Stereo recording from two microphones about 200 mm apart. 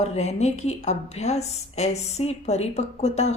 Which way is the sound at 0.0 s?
35° left (ahead or behind).